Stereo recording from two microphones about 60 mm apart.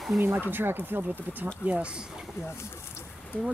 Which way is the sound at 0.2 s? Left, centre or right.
Right.